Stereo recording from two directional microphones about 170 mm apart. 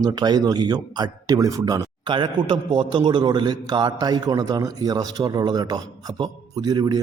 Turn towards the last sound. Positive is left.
turn(degrees=-25)  # may be behind; listen again after turning